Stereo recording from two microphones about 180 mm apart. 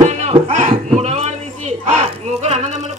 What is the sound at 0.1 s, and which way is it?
Music, 40° right (ahead or behind).